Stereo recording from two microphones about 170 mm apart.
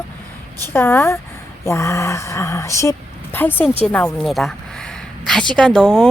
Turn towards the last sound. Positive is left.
turn(degrees=-5)  # may be behind; listen again after turning